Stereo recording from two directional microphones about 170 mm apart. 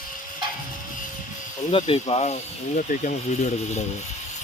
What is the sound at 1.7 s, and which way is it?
Speech, 35° left (ahead or behind).